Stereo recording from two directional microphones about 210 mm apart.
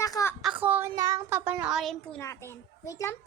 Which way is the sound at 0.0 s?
15° left (ahead or behind).